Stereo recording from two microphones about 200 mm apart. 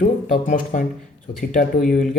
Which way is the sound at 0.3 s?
40° left (ahead or behind).